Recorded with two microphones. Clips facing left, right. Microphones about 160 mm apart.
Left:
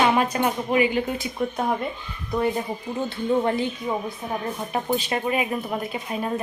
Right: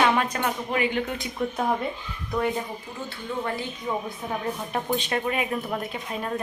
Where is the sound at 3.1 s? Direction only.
20° left (ahead or behind).